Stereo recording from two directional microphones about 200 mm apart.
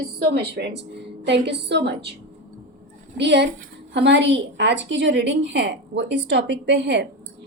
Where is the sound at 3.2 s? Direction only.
60° right (ahead or behind).